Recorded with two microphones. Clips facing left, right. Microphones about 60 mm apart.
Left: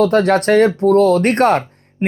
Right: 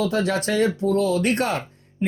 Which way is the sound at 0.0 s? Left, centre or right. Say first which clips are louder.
Left 9 dB; left.